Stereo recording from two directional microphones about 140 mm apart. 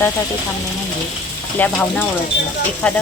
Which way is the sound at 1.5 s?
10° left (ahead or behind).